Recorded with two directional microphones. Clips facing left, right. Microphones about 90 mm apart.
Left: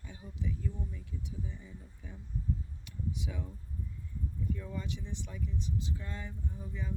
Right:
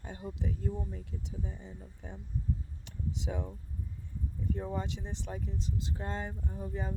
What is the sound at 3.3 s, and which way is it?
Speech, 35° right (ahead or behind).